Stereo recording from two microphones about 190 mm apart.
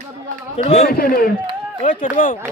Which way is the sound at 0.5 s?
30° left (ahead or behind).